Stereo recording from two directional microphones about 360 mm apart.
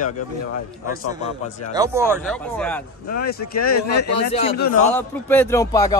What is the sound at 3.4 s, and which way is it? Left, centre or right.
Speech, left.